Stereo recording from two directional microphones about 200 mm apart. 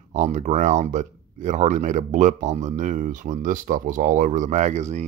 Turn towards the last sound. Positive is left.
turn(degrees=-35)  # may be behind; listen again after turning